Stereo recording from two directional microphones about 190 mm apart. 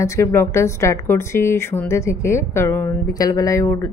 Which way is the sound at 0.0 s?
15° left (ahead or behind).